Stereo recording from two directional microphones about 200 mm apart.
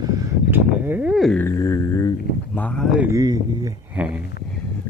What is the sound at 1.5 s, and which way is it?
Speech, 15° left (ahead or behind).